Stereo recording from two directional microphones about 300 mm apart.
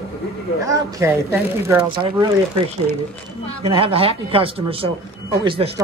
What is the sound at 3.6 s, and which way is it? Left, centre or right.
Speech, centre.